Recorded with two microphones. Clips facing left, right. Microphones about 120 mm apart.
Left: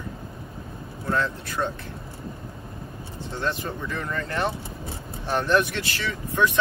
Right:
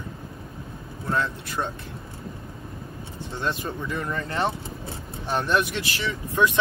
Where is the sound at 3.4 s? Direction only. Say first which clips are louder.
Even; 20° right (ahead or behind).